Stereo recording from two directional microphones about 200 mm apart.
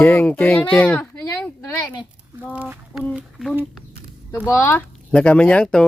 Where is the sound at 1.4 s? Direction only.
5° left (ahead or behind).